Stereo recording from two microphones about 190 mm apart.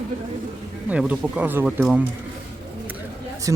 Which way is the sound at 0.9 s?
5° right (ahead or behind).